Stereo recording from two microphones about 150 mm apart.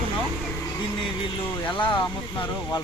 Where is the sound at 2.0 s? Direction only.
20° left (ahead or behind).